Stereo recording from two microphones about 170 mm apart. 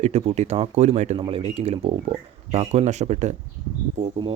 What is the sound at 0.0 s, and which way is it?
Speech, 40° right (ahead or behind).